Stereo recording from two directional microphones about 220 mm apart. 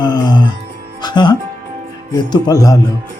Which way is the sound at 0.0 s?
20° left (ahead or behind).